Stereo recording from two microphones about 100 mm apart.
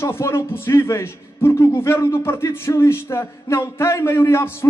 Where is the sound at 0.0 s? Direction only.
25° left (ahead or behind).